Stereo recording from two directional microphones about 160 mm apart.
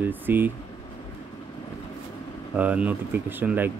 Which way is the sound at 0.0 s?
10° right (ahead or behind).